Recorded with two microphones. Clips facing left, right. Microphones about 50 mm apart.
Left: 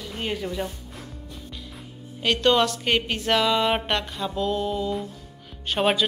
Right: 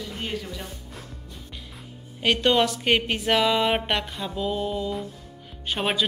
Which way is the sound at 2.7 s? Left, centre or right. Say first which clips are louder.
Right 1 dB; right.